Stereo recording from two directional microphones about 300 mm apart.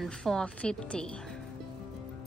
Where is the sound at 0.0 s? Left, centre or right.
Centre.